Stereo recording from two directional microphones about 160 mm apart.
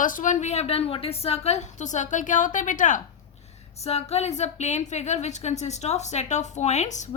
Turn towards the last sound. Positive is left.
turn(degrees=45)  # may be behind; listen again after turning